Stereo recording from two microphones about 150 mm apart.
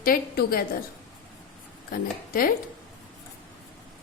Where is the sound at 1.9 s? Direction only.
75° left (ahead or behind).